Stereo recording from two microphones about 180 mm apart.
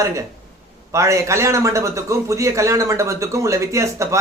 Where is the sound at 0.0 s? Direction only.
15° right (ahead or behind).